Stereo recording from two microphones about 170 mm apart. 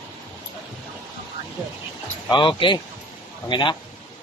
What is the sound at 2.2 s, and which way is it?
Speech, 30° left (ahead or behind).